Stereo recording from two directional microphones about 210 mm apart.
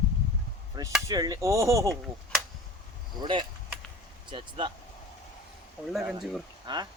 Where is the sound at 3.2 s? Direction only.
25° right (ahead or behind).